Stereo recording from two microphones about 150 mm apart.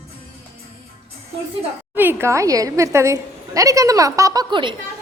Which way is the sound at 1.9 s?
15° right (ahead or behind).